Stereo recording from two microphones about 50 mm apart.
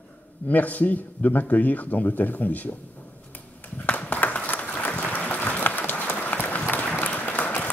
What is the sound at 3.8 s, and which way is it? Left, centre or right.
Applause, left.